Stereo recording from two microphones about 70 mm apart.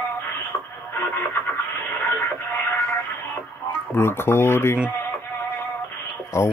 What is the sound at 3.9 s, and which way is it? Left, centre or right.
Speech, left.